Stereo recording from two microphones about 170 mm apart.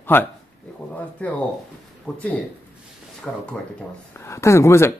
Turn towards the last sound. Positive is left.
turn(degrees=15)  # may be behind; listen again after turning